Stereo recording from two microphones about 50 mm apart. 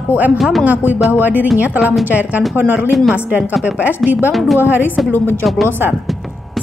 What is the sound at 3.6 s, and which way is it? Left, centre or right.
Speech, right.